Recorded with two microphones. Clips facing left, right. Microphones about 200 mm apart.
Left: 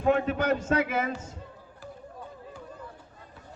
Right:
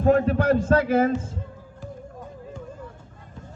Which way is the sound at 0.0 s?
40° right (ahead or behind).